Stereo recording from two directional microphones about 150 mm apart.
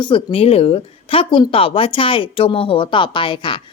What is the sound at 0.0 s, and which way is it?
Speech, 35° left (ahead or behind).